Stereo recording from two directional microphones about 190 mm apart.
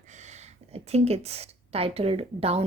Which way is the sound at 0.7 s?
35° right (ahead or behind).